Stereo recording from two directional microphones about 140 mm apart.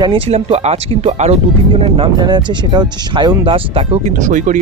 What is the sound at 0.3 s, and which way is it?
Speech, 45° right (ahead or behind).